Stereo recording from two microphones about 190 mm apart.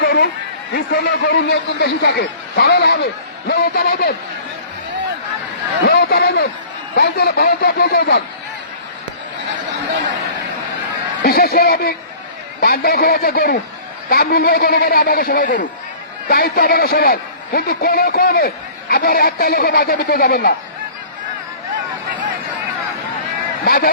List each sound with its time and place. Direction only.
0.0 s a sound: 55° left (ahead or behind)
0.7 s a man's voice: 55° left (ahead or behind)
5.8 s a man's voice: 60° left (ahead or behind)
11.2 s a man's voice: 55° left (ahead or behind)
23.6 s speech: 50° left (ahead or behind)